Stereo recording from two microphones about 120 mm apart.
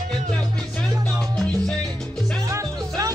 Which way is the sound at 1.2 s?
5° left (ahead or behind).